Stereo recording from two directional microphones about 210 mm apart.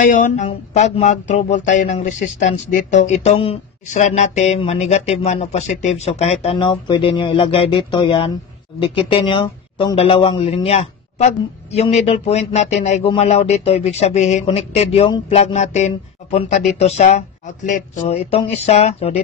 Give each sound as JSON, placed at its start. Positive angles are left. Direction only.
{"t": 0.0, "sound": "a man's voice", "side_deg": 35}